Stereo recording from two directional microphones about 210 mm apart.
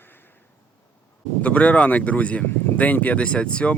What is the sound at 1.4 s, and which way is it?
Speech, 5° left (ahead or behind).